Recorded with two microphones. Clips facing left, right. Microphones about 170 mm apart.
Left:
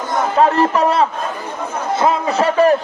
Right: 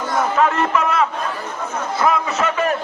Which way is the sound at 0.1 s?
35° left (ahead or behind).